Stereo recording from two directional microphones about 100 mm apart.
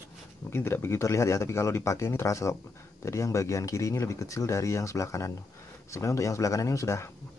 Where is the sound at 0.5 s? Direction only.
25° left (ahead or behind).